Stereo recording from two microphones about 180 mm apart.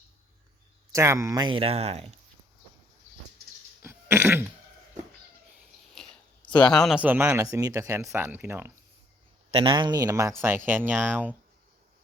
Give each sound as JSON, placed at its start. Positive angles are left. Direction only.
{"t": 0.9, "sound": "speech", "side_deg": -15}
{"t": 3.8, "sound": "throat clearing", "side_deg": -15}
{"t": 5.9, "sound": "a sound", "side_deg": 0}
{"t": 6.5, "sound": "speech", "side_deg": 25}
{"t": 6.7, "sound": "speech", "side_deg": 0}
{"t": 9.5, "sound": "speech", "side_deg": -30}